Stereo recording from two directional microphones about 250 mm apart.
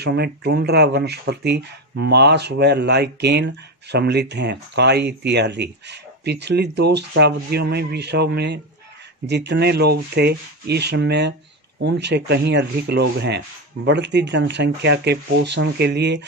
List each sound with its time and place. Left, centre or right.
0.0 s speech: right